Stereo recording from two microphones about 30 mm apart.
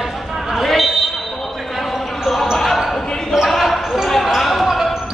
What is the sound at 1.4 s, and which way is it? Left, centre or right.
Basketball bounce, centre.